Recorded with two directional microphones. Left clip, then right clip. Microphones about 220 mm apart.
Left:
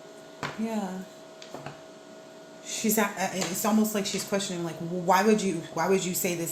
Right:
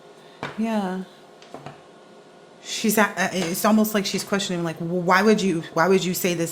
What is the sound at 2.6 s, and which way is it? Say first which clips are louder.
A woman's voice: right 6 dB; 40° right (ahead or behind).